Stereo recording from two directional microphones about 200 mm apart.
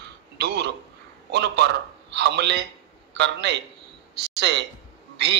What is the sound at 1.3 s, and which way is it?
A man's voice, 60° right (ahead or behind).